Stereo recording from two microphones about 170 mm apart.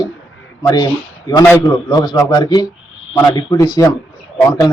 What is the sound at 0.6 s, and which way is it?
A man's voice, 20° left (ahead or behind).